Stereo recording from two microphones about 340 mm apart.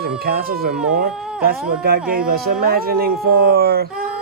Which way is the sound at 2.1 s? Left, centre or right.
Right.